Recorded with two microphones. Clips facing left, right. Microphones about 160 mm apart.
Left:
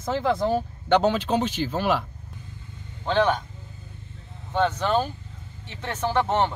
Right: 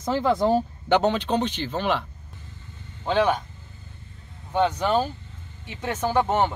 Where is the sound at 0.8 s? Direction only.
Centre (ahead or behind).